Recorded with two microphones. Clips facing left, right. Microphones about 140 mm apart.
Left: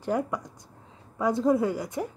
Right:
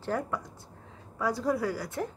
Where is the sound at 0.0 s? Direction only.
15° left (ahead or behind).